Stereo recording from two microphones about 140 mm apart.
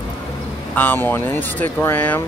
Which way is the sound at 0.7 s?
15° left (ahead or behind).